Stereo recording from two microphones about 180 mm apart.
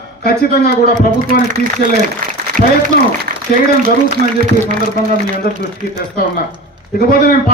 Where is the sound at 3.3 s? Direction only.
50° right (ahead or behind).